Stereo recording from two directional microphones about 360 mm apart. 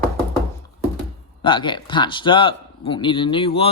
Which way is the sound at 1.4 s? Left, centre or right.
Centre.